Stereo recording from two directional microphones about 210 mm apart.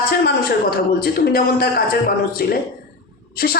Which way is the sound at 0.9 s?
45° left (ahead or behind).